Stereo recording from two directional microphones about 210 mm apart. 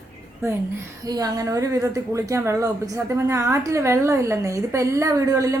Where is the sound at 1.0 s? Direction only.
15° right (ahead or behind).